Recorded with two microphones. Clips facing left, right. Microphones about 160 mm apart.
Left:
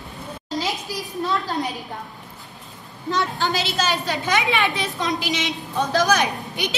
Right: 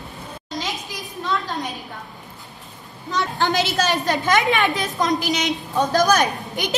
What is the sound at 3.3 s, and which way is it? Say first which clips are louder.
A woman's voice: right 3 dB; 45° right (ahead or behind).